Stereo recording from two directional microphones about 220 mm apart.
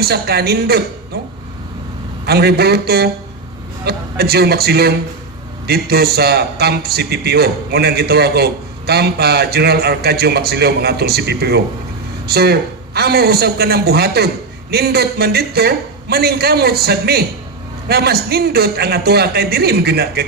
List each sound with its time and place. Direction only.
0.0 s a man's voice: 45° right (ahead or behind)
2.2 s a man's voice: 45° right (ahead or behind)